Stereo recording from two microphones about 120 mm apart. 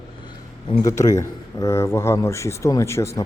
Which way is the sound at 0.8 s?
30° left (ahead or behind).